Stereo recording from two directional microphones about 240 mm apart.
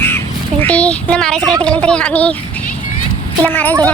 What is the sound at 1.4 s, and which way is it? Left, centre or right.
Speech, centre.